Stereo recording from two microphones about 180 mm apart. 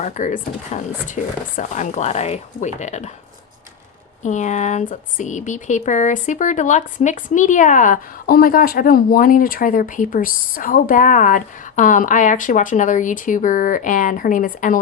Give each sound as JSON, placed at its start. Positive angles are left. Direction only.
{"t": 0.0, "sound": "speech", "side_deg": 45}
{"t": 4.2, "sound": "speech", "side_deg": 40}